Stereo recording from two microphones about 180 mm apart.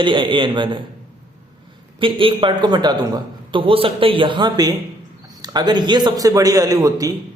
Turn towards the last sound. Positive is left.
turn(degrees=-20)  # may be behind; listen again after turning